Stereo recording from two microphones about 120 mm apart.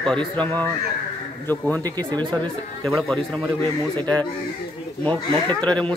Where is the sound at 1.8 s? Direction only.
35° right (ahead or behind).